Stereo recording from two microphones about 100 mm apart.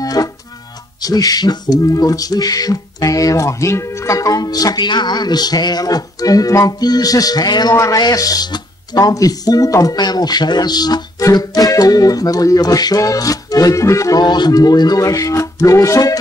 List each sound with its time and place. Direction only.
0.0 s music: 40° left (ahead or behind)
1.0 s speech: 40° left (ahead or behind)
14.2 s speech: 45° left (ahead or behind)